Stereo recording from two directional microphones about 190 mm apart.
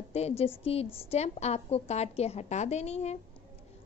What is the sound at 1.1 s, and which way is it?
A woman's voice, 35° left (ahead or behind).